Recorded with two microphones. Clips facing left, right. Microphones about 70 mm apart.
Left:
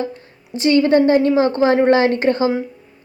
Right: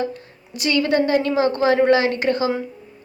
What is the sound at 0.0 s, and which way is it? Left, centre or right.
A woman's voice, left.